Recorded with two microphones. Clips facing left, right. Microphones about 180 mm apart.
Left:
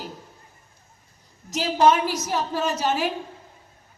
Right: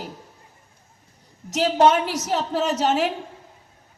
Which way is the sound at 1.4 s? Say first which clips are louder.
Right 2 dB; 75° right (ahead or behind).